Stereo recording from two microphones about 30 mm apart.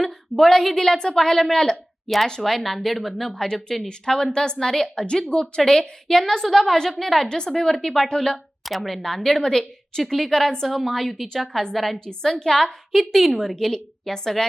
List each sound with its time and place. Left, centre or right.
0.0 s a woman's voice: centre
2.4 s a woman's voice: centre
3.2 s a woman's voice: centre
4.6 s a woman's voice: centre
4.9 s a woman's voice: left
5.6 s a woman's voice: centre
7.3 s a woman's voice: left
8.6 s speech: centre
9.0 s a woman's voice: centre
10.0 s a woman's voice: centre
10.7 s a woman's voice: centre
12.2 s a woman's voice: centre
13.1 s a woman's voice: centre
13.4 s a woman's voice: centre